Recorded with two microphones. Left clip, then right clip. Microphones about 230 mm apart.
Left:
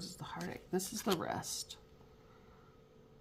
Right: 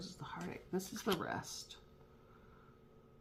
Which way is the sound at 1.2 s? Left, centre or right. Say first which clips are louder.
Left 3 dB; left.